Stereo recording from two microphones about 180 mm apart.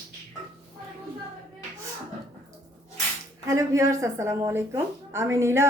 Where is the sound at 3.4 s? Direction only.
15° right (ahead or behind).